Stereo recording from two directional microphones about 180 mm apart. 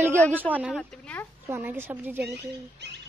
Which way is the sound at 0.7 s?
5° left (ahead or behind).